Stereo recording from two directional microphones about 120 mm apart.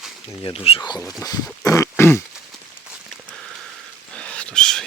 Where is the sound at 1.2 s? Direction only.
25° left (ahead or behind).